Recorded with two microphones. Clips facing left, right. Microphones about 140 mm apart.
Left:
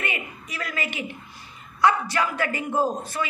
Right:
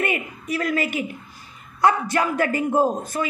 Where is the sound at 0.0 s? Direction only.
45° right (ahead or behind).